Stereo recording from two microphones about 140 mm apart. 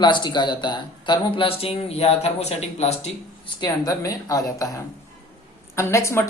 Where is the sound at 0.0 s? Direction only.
30° left (ahead or behind); by 3.1 s 50° left (ahead or behind).